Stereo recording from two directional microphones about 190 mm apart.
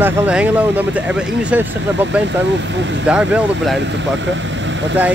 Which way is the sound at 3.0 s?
5° right (ahead or behind).